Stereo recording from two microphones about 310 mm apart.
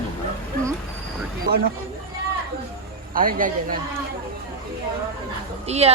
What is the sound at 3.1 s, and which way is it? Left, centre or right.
Speech, right.